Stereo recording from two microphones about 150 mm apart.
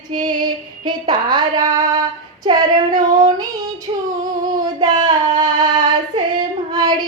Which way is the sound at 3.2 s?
25° right (ahead or behind).